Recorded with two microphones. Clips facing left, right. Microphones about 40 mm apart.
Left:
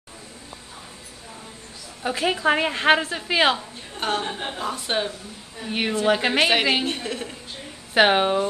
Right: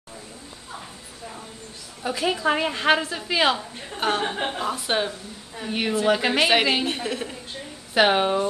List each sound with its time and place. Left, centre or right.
2.0 s a woman's voice: centre
3.5 s a woman's voice: centre
5.7 s a woman's voice: centre
7.9 s a woman's voice: centre